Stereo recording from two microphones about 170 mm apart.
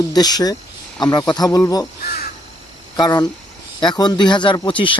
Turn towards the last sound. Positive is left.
turn(degrees=30)  # may be behind; listen again after turning